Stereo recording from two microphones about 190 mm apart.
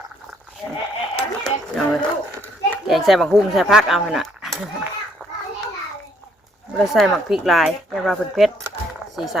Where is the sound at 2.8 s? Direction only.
Centre (ahead or behind).